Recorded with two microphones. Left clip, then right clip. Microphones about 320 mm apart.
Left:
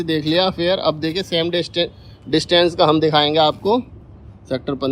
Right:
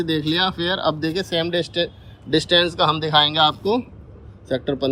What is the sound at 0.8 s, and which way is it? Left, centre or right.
Speech, centre.